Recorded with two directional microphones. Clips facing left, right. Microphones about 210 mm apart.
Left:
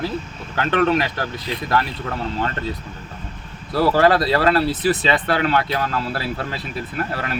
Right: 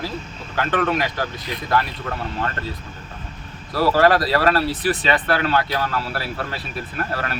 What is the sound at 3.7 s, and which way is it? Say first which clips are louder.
Speech: left 1 dB; 25° left (ahead or behind).